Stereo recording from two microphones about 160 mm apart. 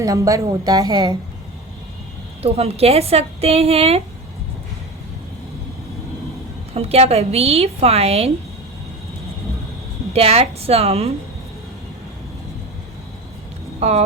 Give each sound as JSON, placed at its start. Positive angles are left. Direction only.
{"t": 0.0, "sound": "a woman's voice", "side_deg": -20}
{"t": 2.4, "sound": "a woman's voice", "side_deg": -40}
{"t": 6.7, "sound": "a woman's voice", "side_deg": -40}
{"t": 10.1, "sound": "a woman's voice", "side_deg": -40}
{"t": 13.7, "sound": "speech", "side_deg": -45}